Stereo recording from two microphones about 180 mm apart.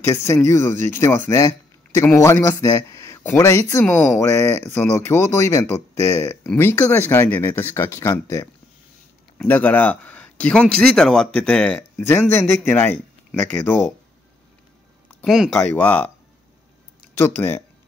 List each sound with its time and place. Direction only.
0.1 s speech: 15° left (ahead or behind)
15.2 s speech: centre (ahead or behind)
15.6 s speech: 10° left (ahead or behind)
17.2 s speech: 10° left (ahead or behind)